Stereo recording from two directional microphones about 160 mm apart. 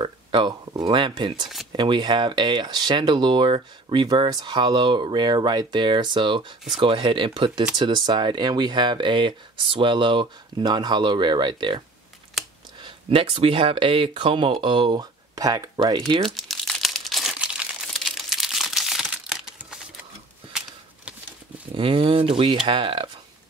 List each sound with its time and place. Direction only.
0.0 s a sound: 30° right (ahead or behind)
1.7 s speech: 30° right (ahead or behind)
12.4 s a sound: centre (ahead or behind)
12.8 s speech: 35° right (ahead or behind)
16.3 s crumpling: centre (ahead or behind)
21.7 s speech: 35° right (ahead or behind)